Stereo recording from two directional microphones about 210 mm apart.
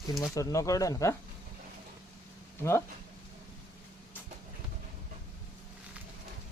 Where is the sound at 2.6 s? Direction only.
10° left (ahead or behind).